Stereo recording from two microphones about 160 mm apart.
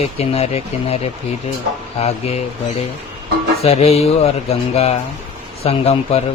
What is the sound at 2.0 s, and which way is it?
Speech, 40° left (ahead or behind).